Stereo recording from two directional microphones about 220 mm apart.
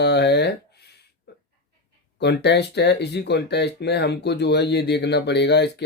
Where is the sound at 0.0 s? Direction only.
50° left (ahead or behind).